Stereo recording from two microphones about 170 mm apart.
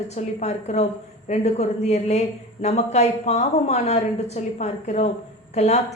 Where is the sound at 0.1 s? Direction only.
40° left (ahead or behind).